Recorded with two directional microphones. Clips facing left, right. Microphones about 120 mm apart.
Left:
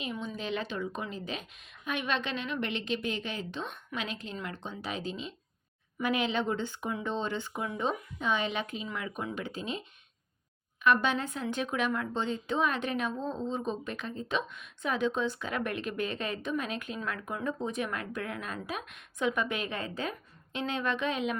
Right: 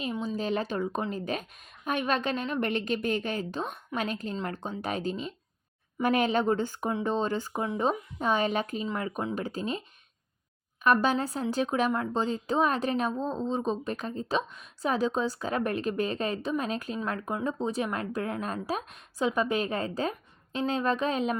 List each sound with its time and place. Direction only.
0.0 s a woman's voice: 35° right (ahead or behind)
10.8 s a woman's voice: 40° right (ahead or behind)